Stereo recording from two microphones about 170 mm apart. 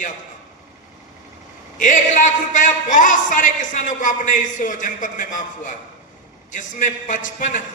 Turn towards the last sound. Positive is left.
turn(degrees=50)  # may be behind; listen again after turning